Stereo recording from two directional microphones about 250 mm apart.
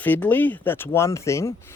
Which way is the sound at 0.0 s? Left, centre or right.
Centre.